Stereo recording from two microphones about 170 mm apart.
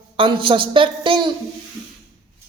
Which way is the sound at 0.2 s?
30° right (ahead or behind).